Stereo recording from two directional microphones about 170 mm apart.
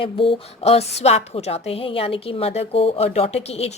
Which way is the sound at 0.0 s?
30° left (ahead or behind).